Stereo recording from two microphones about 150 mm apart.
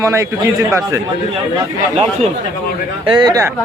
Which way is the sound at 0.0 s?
20° right (ahead or behind).